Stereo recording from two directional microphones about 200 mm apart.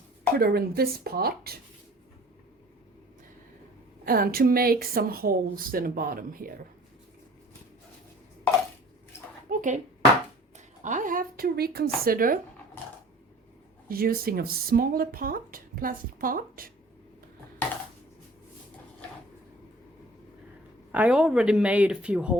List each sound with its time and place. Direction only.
0.3 s speech: 50° right (ahead or behind)
4.0 s speech: 45° right (ahead or behind)
9.5 s a sound: 40° right (ahead or behind)
10.8 s a woman's voice: 40° right (ahead or behind)
13.8 s speech: 45° right (ahead or behind)
20.9 s speech: 5° right (ahead or behind)